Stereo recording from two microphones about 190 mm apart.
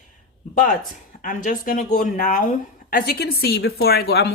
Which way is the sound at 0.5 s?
45° left (ahead or behind).